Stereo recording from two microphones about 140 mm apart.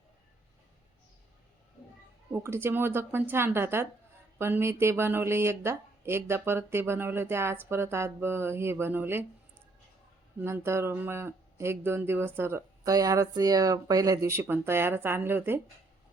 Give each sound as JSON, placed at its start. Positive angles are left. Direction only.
{"t": 2.3, "sound": "speech", "side_deg": -15}
{"t": 10.4, "sound": "speech", "side_deg": -20}